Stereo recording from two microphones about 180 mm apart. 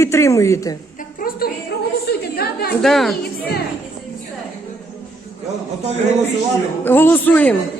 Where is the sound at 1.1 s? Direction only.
55° left (ahead or behind).